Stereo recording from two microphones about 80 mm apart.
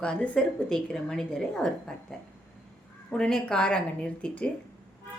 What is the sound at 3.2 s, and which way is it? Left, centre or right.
A woman's voice, centre.